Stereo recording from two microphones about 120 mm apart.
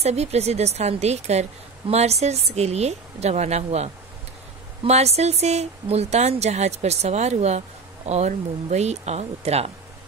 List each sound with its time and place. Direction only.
0.0 s speech: 65° right (ahead or behind)